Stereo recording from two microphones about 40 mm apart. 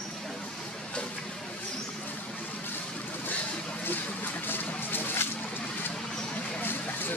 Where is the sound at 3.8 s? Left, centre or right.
Left.